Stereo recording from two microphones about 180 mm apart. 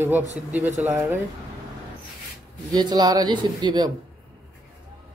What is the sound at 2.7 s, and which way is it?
Speech, 20° right (ahead or behind).